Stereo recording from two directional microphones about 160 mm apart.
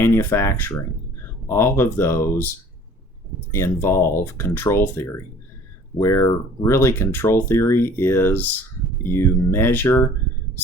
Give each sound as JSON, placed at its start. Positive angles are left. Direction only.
{"t": 0.0, "sound": "speech", "side_deg": 15}
{"t": 3.5, "sound": "speech", "side_deg": 15}